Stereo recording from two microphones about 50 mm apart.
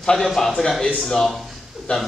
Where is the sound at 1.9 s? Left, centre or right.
Left.